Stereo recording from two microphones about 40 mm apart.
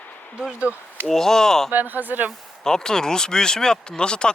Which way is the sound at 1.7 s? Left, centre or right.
Right.